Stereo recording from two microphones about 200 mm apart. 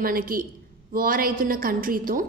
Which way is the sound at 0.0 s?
45° right (ahead or behind).